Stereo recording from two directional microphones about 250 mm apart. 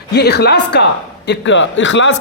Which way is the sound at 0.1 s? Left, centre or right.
Left.